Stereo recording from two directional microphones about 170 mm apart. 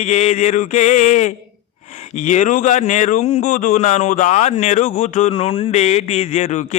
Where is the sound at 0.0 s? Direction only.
40° left (ahead or behind).